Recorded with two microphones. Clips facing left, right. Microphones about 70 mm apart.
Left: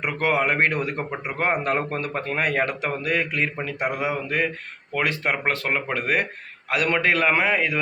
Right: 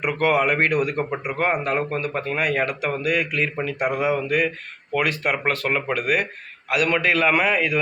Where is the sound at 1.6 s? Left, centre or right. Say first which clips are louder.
Right 1 dB; left.